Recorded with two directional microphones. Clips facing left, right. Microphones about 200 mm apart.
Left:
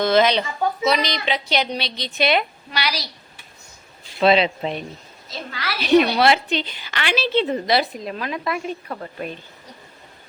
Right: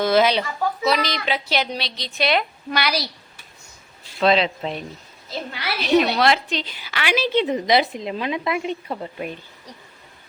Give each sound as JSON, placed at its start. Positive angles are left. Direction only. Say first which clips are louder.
{"t": 0.0, "sound": "a woman's voice", "louder": "left 1 dB", "side_deg": -10}
{"t": 0.4, "sound": "a sound", "louder": "left 1 dB", "side_deg": 20}
{"t": 0.9, "sound": "a woman's voice", "louder": "even", "side_deg": 0}
{"t": 2.6, "sound": "a woman's voice", "louder": "right 3 dB", "side_deg": -55}
{"t": 4.2, "sound": "a woman's voice", "louder": "left 2 dB", "side_deg": 5}
{"t": 6.0, "sound": "a woman's voice", "louder": "left 2 dB", "side_deg": 5}